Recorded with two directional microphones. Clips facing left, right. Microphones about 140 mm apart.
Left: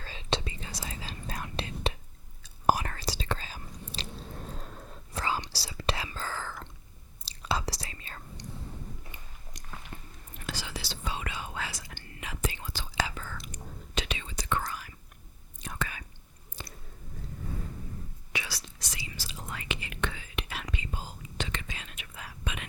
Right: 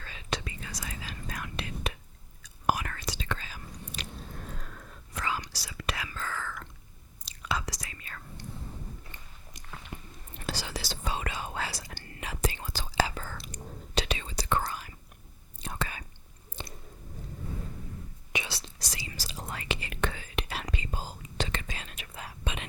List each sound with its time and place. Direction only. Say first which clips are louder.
0.0 s whispering: left 3 dB; 30° left (ahead or behind)
9.1 s biting: left 1 dB; 10° left (ahead or behind)
9.5 s biting: even; centre (ahead or behind)
10.3 s whispering: right 3 dB; 35° right (ahead or behind)
16.6 s squish: right 3 dB; 25° right (ahead or behind)
18.3 s whispering: right 2 dB; 25° right (ahead or behind)